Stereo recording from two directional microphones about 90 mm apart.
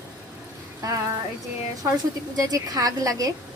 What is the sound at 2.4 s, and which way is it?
Speech, 45° right (ahead or behind).